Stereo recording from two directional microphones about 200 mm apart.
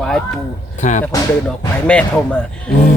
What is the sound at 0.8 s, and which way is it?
Speech, 35° left (ahead or behind).